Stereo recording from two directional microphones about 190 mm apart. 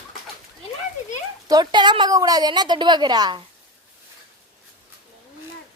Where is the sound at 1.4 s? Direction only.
20° right (ahead or behind).